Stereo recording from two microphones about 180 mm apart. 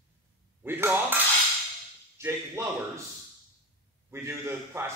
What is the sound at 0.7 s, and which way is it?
Speech, 10° right (ahead or behind).